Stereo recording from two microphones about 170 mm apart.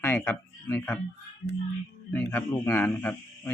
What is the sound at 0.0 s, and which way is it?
Speech, 10° left (ahead or behind).